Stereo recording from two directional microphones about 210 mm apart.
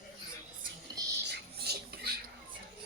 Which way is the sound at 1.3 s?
50° right (ahead or behind).